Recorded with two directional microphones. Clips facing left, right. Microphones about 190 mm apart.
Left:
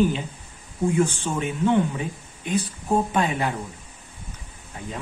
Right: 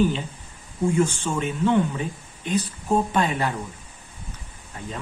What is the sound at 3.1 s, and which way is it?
Speech, 10° left (ahead or behind).